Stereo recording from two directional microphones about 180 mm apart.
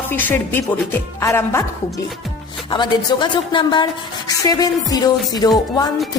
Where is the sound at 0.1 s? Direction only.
10° left (ahead or behind).